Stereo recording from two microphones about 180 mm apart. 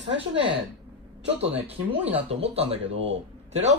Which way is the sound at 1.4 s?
35° right (ahead or behind).